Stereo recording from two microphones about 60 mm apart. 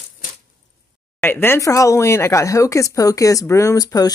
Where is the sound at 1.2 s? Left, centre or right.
Left.